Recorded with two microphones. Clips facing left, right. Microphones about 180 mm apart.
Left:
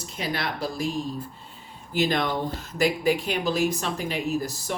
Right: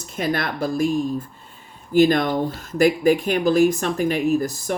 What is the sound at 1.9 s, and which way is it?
Speech, 45° right (ahead or behind).